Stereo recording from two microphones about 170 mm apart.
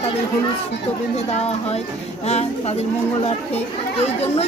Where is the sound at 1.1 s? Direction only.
40° left (ahead or behind).